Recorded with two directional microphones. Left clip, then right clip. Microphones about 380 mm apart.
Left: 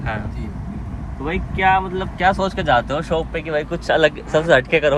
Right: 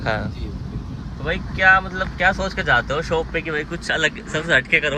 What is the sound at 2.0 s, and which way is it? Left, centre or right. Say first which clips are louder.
Speech: left 2 dB; centre.